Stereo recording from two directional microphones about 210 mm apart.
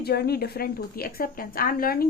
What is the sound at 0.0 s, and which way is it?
A woman's voice, 50° left (ahead or behind).